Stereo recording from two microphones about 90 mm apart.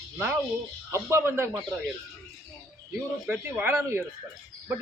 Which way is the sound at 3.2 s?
20° right (ahead or behind).